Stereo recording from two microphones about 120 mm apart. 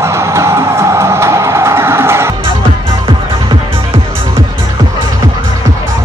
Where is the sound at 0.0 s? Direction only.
25° right (ahead or behind).